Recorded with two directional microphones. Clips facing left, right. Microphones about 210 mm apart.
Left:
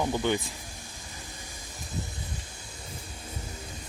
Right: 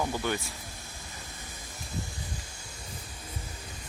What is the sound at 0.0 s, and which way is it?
Speech, 20° left (ahead or behind).